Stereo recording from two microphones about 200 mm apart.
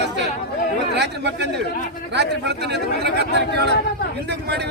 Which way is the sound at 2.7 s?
55° right (ahead or behind).